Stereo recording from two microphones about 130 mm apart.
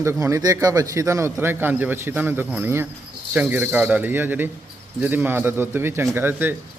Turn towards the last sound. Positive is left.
turn(degrees=-15)  # may be behind; listen again after turning